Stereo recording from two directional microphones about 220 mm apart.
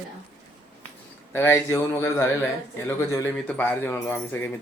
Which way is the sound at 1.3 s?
10° left (ahead or behind).